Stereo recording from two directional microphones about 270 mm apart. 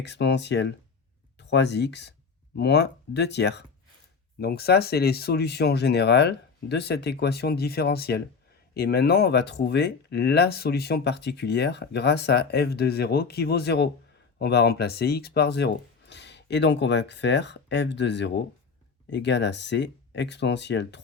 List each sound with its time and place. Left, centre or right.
0.0 s speech: left